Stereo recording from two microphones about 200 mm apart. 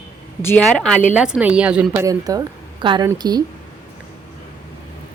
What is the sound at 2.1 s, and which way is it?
A woman's voice, 20° right (ahead or behind).